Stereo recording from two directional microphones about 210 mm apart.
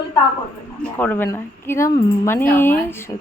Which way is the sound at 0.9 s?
10° left (ahead or behind).